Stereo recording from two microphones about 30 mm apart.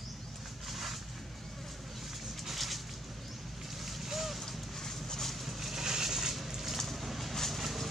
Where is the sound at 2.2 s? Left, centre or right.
Centre.